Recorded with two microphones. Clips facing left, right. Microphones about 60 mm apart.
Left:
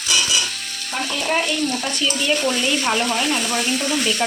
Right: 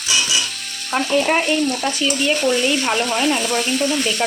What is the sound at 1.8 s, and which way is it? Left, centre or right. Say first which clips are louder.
Frying: right 3 dB; centre.